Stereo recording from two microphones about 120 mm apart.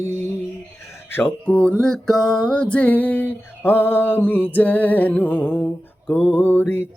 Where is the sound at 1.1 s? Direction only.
15° left (ahead or behind).